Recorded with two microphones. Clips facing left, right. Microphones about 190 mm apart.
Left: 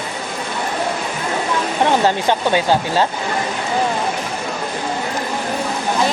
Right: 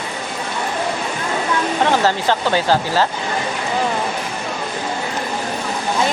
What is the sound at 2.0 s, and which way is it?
Speech, 15° left (ahead or behind).